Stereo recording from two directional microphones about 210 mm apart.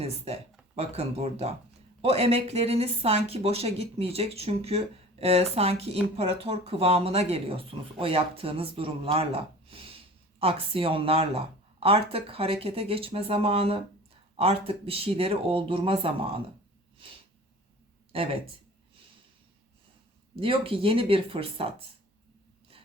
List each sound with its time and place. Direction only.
0.3 s a sound: 30° right (ahead or behind)
0.8 s speech: 30° right (ahead or behind)
18.1 s speech: 25° right (ahead or behind)
20.3 s speech: 25° right (ahead or behind)